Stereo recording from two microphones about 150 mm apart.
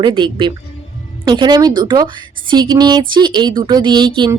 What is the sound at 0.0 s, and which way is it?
Speech, 30° right (ahead or behind).